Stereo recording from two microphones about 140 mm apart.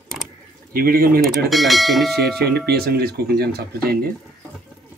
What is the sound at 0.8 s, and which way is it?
Speech, 90° right.